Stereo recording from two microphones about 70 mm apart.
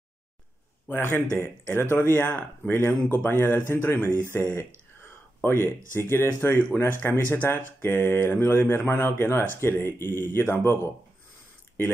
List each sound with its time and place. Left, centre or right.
0.8 s speech: left
5.4 s speech: left